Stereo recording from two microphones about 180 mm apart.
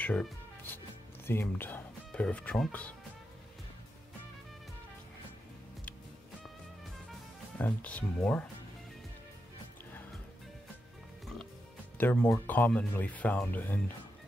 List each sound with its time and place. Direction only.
0.0 s speech: 10° left (ahead or behind)
6.4 s music: centre (ahead or behind)
12.0 s speech: 10° left (ahead or behind)